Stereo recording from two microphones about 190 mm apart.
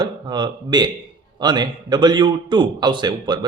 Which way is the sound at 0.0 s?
25° right (ahead or behind).